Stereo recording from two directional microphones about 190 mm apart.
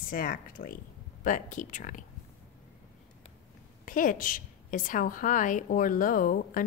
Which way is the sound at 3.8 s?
45° left (ahead or behind).